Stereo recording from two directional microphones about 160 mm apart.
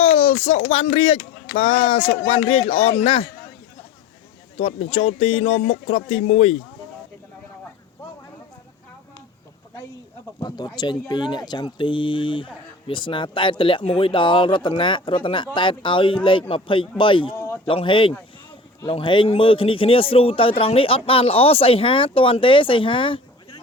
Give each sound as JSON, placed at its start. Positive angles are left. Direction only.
{"t": 0.0, "sound": "a sound", "side_deg": 40}
{"t": 0.7, "sound": "speech", "side_deg": 40}
{"t": 4.5, "sound": "speech", "side_deg": 40}
{"t": 10.4, "sound": "speech", "side_deg": 25}
{"t": 17.3, "sound": "a sound", "side_deg": 15}
{"t": 17.7, "sound": "speech", "side_deg": 30}